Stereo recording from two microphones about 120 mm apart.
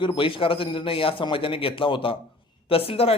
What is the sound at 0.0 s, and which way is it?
A man's voice, 45° left (ahead or behind).